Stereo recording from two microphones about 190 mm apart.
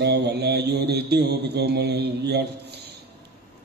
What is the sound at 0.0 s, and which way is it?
A man's voice, 60° right (ahead or behind).